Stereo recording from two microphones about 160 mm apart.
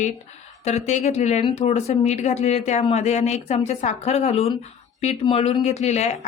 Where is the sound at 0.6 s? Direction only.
45° left (ahead or behind).